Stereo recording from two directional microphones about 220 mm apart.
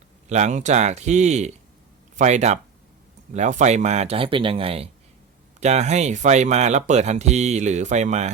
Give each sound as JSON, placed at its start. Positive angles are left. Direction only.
{"t": 0.3, "sound": "speech", "side_deg": -30}